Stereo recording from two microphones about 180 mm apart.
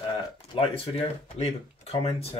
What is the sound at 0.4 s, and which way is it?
Speech, 35° left (ahead or behind).